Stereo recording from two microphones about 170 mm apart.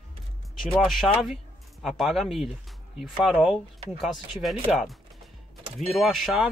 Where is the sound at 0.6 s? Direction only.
Centre (ahead or behind).